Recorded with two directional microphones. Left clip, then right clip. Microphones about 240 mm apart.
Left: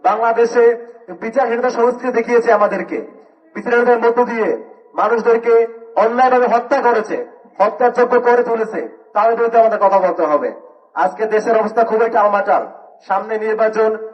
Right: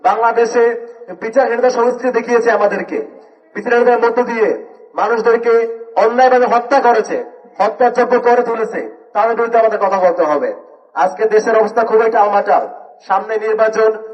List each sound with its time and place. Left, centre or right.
0.0 s a man's voice: right